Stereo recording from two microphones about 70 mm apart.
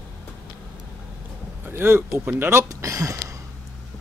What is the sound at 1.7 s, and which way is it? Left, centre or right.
Speech, right.